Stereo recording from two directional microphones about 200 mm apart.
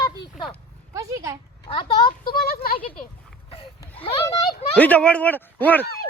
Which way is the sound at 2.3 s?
50° left (ahead or behind).